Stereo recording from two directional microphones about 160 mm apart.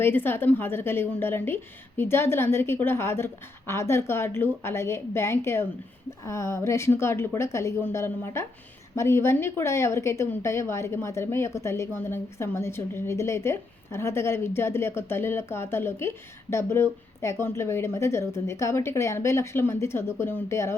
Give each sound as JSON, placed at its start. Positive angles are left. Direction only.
{"t": 0.0, "sound": "a woman's voice", "side_deg": 15}